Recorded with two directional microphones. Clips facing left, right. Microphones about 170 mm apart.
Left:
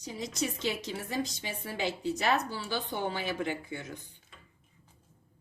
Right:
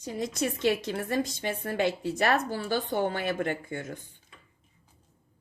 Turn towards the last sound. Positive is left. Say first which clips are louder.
# right 4 dB
turn(degrees=-50)  # may be behind; listen again after turning